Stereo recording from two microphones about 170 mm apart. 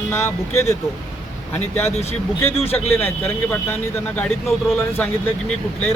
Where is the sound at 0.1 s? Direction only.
15° left (ahead or behind).